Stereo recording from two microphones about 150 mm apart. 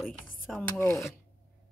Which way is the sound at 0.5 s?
15° left (ahead or behind).